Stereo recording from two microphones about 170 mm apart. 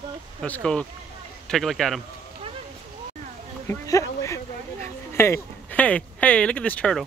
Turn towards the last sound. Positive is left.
turn(degrees=5)  # may be behind; listen again after turning